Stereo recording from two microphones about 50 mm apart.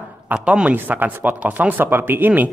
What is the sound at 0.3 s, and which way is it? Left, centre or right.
A man's voice, right.